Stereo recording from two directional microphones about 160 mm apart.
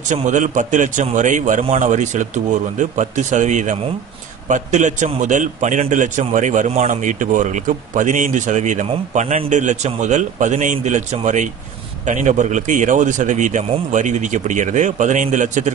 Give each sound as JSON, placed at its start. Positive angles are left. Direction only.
{"t": 0.1, "sound": "a man's voice", "side_deg": -50}